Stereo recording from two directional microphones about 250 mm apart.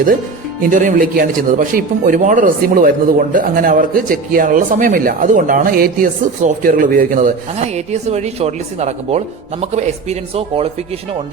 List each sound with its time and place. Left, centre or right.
0.6 s a man's voice: right